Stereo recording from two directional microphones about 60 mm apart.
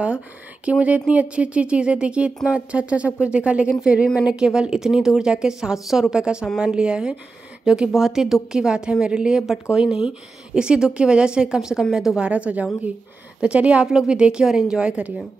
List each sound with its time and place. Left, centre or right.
0.7 s a woman's voice: right; by 12.2 s centre
12.2 s a woman's voice: right